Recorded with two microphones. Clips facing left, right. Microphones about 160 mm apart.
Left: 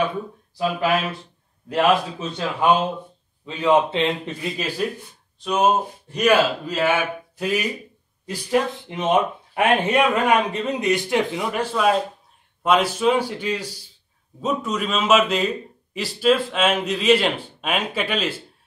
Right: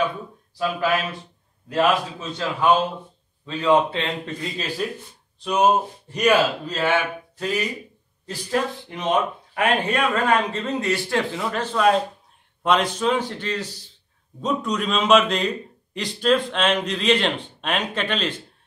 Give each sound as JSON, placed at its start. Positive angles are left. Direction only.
{"t": 0.6, "sound": "a man's voice", "side_deg": 15}
{"t": 8.3, "sound": "a man's voice", "side_deg": 20}